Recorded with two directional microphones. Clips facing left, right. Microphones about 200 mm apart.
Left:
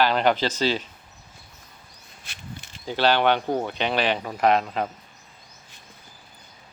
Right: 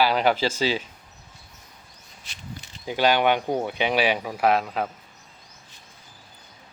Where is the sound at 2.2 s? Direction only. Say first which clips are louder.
Even; 55° left (ahead or behind).